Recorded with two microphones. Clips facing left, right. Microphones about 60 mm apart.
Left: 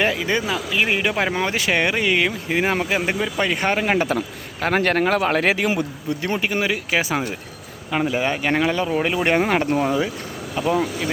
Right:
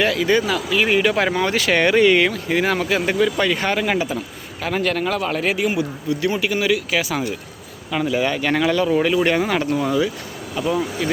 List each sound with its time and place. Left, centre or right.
0.0 s speech: left; by 2.3 s centre
2.3 s speech: centre
3.9 s speech: left